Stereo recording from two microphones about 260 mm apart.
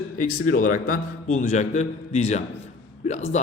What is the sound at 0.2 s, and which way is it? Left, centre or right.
A man's voice, left.